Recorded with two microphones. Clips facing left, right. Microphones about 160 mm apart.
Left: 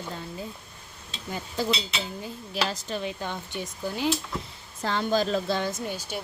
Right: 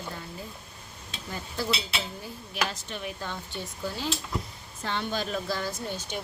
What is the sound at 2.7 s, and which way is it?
Speech, 35° left (ahead or behind).